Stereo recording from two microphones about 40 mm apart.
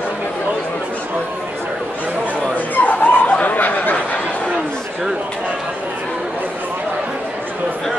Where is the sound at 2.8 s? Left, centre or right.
Left.